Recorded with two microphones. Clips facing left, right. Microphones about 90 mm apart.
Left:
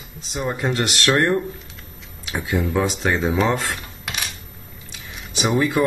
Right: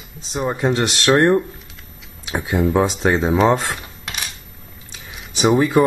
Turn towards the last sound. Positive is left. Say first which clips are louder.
# right 5 dB
turn(degrees=-30)  # may be behind; listen again after turning